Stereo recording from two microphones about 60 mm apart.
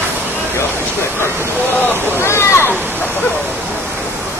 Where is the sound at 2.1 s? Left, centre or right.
Left.